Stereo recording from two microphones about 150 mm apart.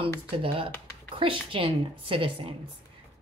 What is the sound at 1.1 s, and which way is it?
Speech, 35° right (ahead or behind).